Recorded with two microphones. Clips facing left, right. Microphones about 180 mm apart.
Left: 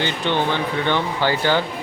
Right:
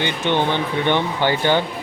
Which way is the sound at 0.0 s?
20° right (ahead or behind).